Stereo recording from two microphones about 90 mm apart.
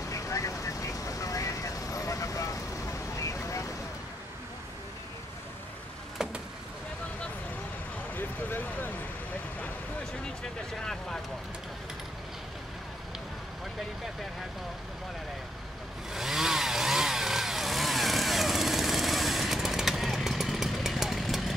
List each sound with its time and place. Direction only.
0.1 s vehicle: 35° left (ahead or behind)
6.2 s vehicle: 5° right (ahead or behind)
8.2 s speech: 20° left (ahead or behind)
10.7 s speech: 5° left (ahead or behind)
16.1 s chainsaw: 5° right (ahead or behind)